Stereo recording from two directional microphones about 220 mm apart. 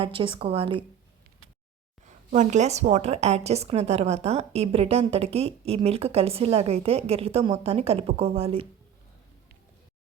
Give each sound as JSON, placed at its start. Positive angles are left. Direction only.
{"t": 0.0, "sound": "a woman's voice", "side_deg": -25}
{"t": 2.3, "sound": "a woman's voice", "side_deg": -35}